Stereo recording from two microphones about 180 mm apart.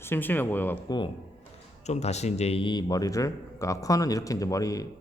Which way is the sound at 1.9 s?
40° left (ahead or behind).